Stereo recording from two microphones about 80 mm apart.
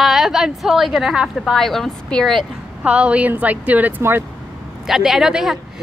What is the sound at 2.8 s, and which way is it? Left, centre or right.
A woman's voice, centre.